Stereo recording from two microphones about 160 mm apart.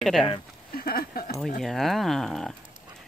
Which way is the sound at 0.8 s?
70° left (ahead or behind).